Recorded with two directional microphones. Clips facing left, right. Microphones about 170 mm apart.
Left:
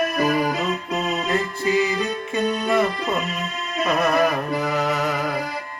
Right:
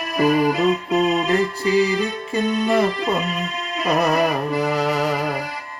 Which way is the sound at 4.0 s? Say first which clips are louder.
Right 1 dB; 35° right (ahead or behind).